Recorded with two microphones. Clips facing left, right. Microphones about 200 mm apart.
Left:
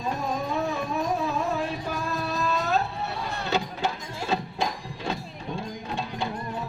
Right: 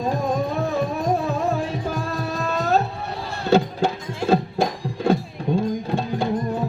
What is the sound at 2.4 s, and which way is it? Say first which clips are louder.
Music: right 5 dB; 45° right (ahead or behind).